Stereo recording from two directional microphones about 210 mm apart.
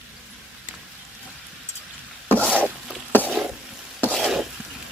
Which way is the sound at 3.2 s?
Centre (ahead or behind).